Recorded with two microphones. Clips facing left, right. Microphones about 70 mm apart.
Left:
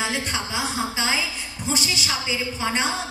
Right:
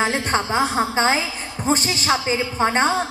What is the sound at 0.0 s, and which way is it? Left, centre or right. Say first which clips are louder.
A woman's voice: right 6 dB; right.